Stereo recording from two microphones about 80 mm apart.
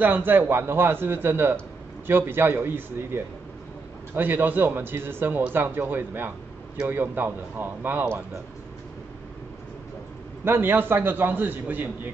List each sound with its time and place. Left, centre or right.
0.0 s a man's voice: right
10.4 s a man's voice: right